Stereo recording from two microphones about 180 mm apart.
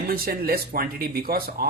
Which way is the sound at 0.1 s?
55° right (ahead or behind).